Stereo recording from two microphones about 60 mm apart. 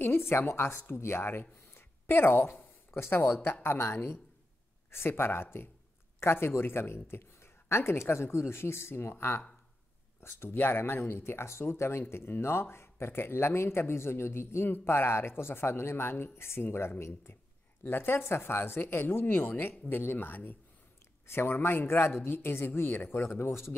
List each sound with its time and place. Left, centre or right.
0.0 s a woman's voice: left